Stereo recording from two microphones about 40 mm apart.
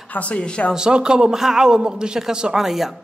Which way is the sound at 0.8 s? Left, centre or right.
Right.